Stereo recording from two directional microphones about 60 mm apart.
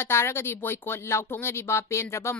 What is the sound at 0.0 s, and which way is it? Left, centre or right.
Speech, left.